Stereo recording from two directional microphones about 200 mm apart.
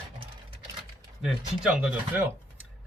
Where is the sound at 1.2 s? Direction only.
5° right (ahead or behind).